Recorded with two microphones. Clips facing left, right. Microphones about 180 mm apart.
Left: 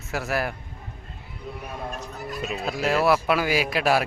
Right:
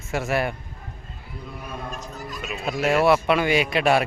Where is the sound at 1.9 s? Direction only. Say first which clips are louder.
Left 1 dB; 60° left (ahead or behind).